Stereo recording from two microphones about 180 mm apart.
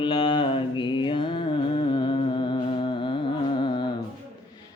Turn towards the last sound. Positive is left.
turn(degrees=25)  # may be behind; listen again after turning